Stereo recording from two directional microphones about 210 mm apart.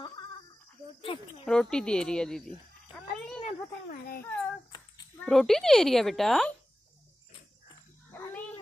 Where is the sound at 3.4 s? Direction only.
40° left (ahead or behind).